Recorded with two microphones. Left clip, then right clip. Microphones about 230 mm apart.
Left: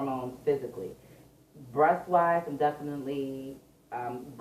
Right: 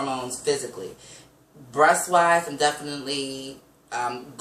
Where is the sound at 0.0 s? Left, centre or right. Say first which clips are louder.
Right 4 dB; right.